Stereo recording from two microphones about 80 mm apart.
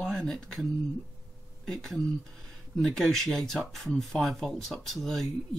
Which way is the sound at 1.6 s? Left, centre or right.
Centre.